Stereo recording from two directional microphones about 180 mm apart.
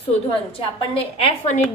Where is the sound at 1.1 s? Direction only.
40° left (ahead or behind).